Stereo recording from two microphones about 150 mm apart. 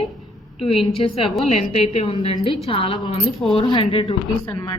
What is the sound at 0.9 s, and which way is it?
A woman's voice, 40° left (ahead or behind).